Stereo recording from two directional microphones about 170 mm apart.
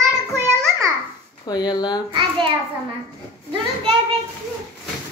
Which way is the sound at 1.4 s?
25° left (ahead or behind).